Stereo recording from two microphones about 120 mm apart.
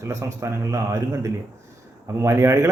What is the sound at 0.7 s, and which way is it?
A man's voice, 25° right (ahead or behind).